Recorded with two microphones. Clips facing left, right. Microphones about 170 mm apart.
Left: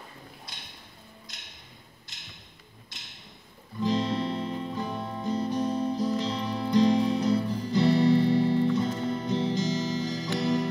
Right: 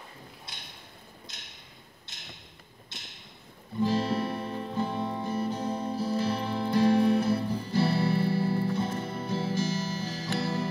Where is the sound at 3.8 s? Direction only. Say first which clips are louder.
Left 1 dB; 20° left (ahead or behind).